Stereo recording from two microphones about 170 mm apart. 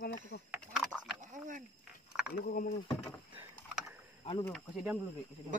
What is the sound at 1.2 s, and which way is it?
Frog, 50° right (ahead or behind).